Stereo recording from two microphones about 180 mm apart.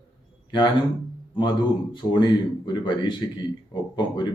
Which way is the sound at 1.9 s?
25° left (ahead or behind).